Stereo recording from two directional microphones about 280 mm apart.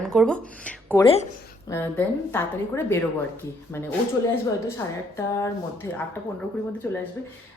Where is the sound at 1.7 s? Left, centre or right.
Centre.